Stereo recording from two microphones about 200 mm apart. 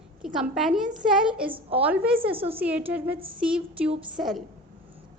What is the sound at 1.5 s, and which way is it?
Speech, 30° right (ahead or behind).